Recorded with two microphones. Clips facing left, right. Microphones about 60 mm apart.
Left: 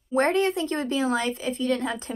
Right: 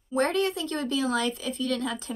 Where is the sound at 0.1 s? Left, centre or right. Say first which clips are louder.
Left 3 dB; left.